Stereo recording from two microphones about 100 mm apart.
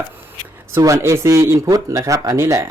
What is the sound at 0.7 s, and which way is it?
Speech, 30° right (ahead or behind).